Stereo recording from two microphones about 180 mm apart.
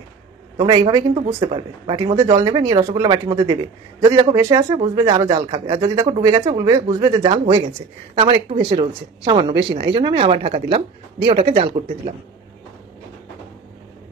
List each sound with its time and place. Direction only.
0.6 s speech: 20° right (ahead or behind)